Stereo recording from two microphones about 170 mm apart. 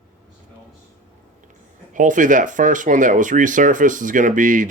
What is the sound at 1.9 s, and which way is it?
Speech, 50° right (ahead or behind).